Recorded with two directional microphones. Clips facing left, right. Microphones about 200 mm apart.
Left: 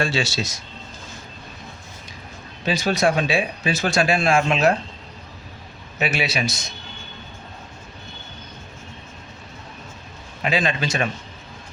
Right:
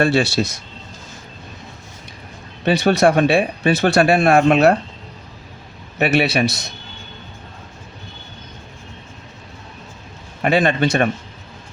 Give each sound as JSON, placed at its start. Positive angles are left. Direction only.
{"t": 0.0, "sound": "speech", "side_deg": -60}
{"t": 2.6, "sound": "speech", "side_deg": -65}
{"t": 6.0, "sound": "speech", "side_deg": -60}
{"t": 10.4, "sound": "speech", "side_deg": -55}